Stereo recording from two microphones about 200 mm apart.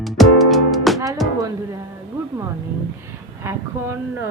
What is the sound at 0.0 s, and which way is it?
Music, centre (ahead or behind).